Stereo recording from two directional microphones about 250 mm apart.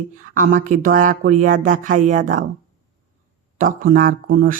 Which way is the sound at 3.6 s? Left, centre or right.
Right.